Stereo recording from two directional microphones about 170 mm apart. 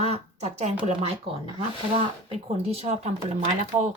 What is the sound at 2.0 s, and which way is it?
Speech, 35° right (ahead or behind).